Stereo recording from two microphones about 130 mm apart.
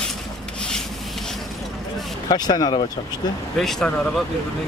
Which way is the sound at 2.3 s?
30° left (ahead or behind).